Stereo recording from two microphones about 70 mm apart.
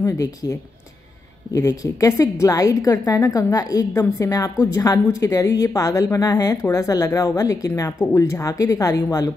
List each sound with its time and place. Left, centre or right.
0.0 s a woman's voice: left